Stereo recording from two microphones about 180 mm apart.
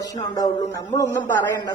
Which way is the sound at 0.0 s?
20° left (ahead or behind).